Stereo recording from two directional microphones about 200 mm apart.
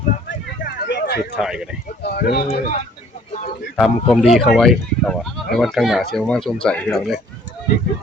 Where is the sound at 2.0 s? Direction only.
50° left (ahead or behind).